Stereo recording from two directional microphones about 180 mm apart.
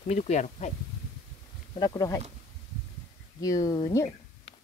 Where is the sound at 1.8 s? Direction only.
20° left (ahead or behind).